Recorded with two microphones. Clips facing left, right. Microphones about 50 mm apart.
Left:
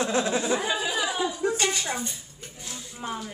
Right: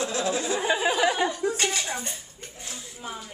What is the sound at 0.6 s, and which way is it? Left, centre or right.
Speech, right.